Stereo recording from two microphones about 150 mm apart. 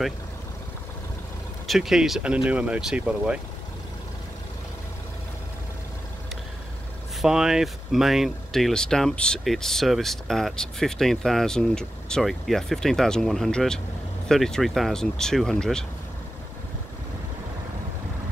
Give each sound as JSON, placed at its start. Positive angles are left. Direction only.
{"t": 1.7, "sound": "speech", "side_deg": -5}
{"t": 7.2, "sound": "speech", "side_deg": -5}